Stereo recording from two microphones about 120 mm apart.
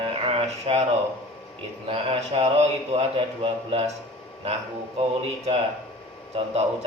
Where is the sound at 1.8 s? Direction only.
55° right (ahead or behind).